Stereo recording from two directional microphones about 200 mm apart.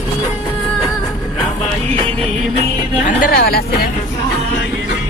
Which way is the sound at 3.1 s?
45° left (ahead or behind).